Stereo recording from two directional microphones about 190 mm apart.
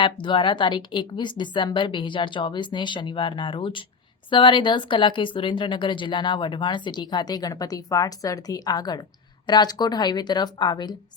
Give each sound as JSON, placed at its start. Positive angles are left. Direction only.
{"t": 0.0, "sound": "speech", "side_deg": 25}